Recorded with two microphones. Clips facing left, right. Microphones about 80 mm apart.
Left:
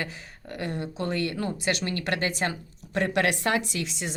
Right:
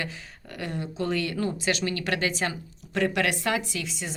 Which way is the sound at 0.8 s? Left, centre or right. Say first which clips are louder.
Right 2 dB; left.